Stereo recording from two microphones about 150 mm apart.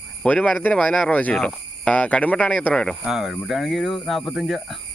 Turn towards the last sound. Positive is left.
turn(degrees=0)  # may be behind; listen again after turning